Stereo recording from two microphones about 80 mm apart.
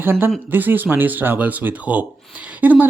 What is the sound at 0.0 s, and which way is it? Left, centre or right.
Speech, right.